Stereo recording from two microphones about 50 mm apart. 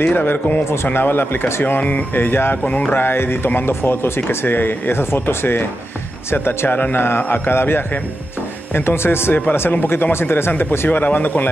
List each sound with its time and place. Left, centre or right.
0.0 s speech: left
1.8 s speech: left
2.6 s speech: left
2.9 s speech: left
10.9 s speech: left